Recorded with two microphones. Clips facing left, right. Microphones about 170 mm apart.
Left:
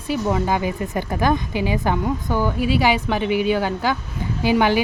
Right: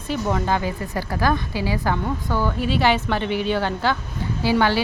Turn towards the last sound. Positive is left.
turn(degrees=15)  # may be behind; listen again after turning